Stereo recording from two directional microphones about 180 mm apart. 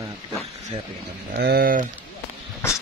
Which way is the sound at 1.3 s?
60° right (ahead or behind).